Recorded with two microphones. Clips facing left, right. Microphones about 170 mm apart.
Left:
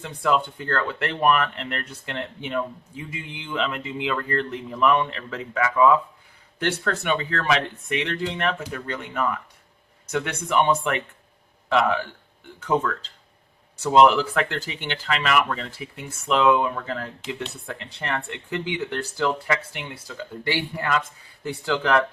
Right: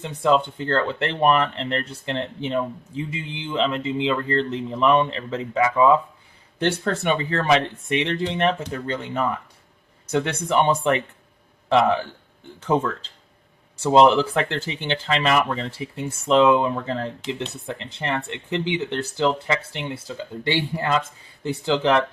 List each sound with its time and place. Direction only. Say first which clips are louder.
0.0 s speech: right 3 dB; 25° right (ahead or behind)
13.8 s speech: right 1 dB; 25° right (ahead or behind)